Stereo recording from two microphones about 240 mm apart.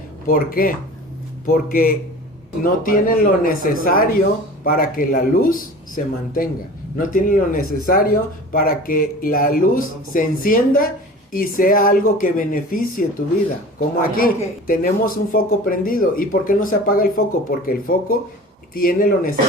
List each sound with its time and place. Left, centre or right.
0.3 s speech: left